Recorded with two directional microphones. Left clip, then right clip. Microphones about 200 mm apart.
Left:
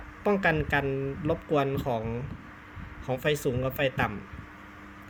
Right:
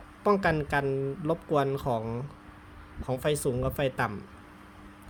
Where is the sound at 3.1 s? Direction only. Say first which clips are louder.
Left 1 dB; 20° right (ahead or behind).